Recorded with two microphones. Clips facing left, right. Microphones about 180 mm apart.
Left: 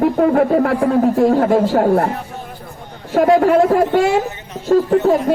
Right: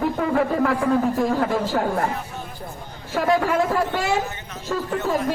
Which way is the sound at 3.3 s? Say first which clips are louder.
Left 8 dB; 40° left (ahead or behind).